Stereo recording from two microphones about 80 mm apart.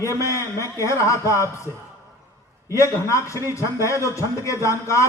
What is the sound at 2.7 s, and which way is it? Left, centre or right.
A man's voice, left.